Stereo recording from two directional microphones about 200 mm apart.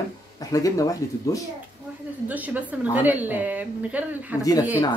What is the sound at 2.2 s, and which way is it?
A woman's voice, 10° right (ahead or behind).